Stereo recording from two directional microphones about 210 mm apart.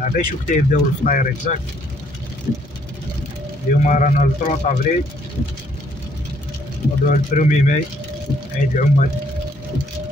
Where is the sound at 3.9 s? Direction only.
35° left (ahead or behind).